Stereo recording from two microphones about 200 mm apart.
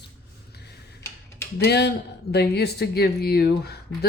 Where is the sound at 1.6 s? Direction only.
55° left (ahead or behind).